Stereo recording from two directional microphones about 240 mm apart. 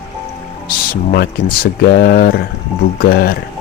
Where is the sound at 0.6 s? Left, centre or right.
Left.